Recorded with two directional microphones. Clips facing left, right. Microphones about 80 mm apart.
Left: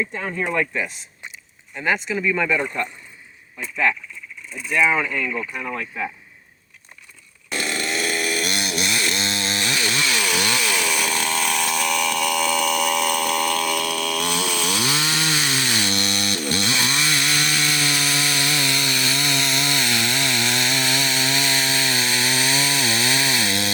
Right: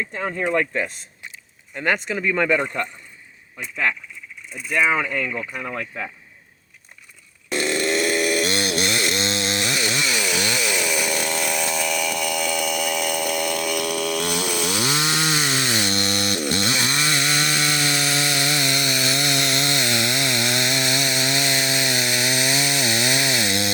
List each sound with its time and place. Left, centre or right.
0.2 s speech: right
4.7 s speech: right
7.5 s chainsaw: right
10.0 s chainsaw: centre
11.1 s chainsaw: centre